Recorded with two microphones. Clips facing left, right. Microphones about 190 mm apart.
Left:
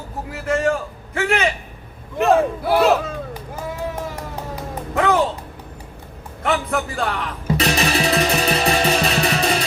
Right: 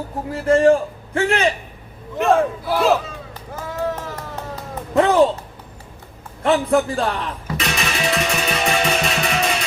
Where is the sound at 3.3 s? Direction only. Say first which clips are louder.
Left 2 dB; 10° left (ahead or behind).